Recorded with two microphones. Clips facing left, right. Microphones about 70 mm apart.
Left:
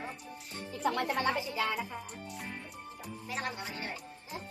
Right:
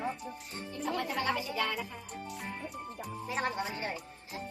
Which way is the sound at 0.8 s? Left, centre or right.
Left.